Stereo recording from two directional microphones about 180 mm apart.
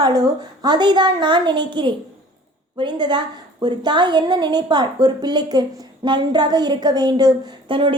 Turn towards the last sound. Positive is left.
turn(degrees=-30)  # may be behind; listen again after turning